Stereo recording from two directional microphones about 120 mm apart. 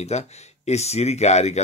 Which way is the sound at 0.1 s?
65° left (ahead or behind).